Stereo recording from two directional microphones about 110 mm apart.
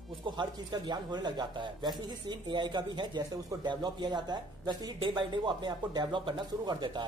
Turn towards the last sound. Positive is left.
turn(degrees=-40)  # may be behind; listen again after turning